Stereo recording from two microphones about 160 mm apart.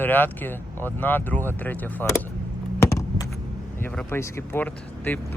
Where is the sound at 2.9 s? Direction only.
20° left (ahead or behind).